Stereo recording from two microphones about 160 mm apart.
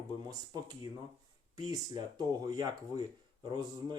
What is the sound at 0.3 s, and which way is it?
Speech, 25° right (ahead or behind).